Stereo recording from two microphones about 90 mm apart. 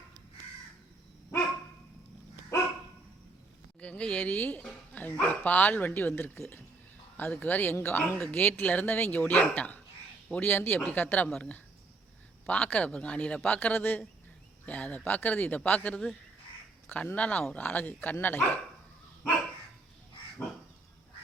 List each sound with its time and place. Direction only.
3.8 s a man's voice: 15° left (ahead or behind)
7.4 s a man's voice: 20° left (ahead or behind)